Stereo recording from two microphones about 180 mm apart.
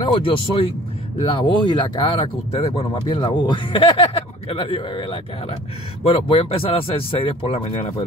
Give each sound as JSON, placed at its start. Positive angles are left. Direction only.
{"t": 0.0, "sound": "speech", "side_deg": 30}